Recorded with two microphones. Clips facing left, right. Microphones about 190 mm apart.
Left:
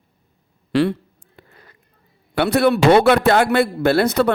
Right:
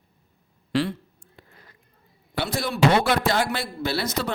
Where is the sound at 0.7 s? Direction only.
65° left (ahead or behind).